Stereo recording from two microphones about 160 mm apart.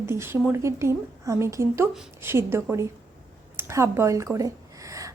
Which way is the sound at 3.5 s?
15° right (ahead or behind).